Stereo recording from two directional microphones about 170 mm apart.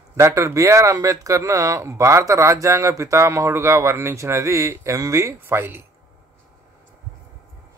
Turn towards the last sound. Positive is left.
turn(degrees=-10)  # may be behind; listen again after turning